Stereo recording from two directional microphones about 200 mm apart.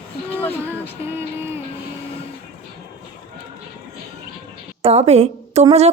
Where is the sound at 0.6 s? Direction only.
10° right (ahead or behind).